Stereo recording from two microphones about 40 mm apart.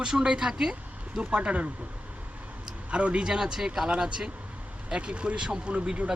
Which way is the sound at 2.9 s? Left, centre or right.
Right.